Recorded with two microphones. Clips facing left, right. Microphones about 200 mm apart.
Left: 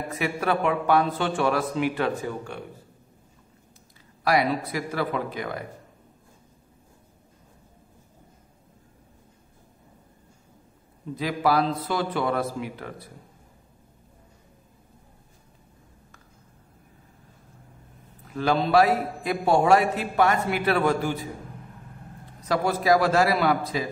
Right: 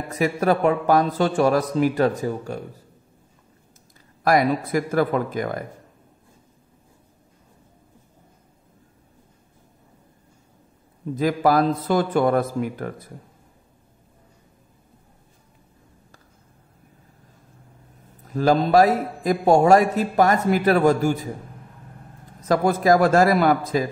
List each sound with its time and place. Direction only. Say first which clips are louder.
0.1 s a man's voice: right 6 dB; 40° right (ahead or behind)
4.2 s a man's voice: right 4 dB; 45° right (ahead or behind)
11.1 s a man's voice: right 5 dB; 45° right (ahead or behind)
18.2 s a man's voice: right 5 dB; 40° right (ahead or behind)
22.4 s a man's voice: right 5 dB; 45° right (ahead or behind)